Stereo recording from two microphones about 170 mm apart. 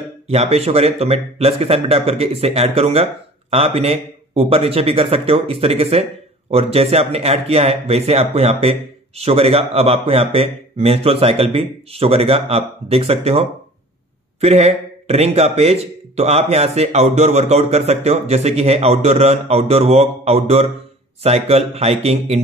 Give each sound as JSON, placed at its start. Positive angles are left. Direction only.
{"t": 0.3, "sound": "speech", "side_deg": -40}